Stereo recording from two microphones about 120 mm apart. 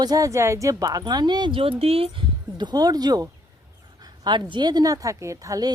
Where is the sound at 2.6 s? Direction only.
35° right (ahead or behind).